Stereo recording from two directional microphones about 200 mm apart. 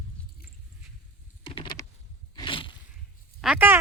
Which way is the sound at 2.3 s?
25° left (ahead or behind).